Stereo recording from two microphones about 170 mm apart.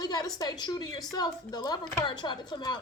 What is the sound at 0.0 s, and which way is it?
Speech, 25° left (ahead or behind).